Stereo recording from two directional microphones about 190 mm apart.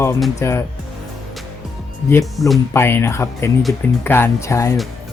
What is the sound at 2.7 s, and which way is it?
Speech, 10° left (ahead or behind).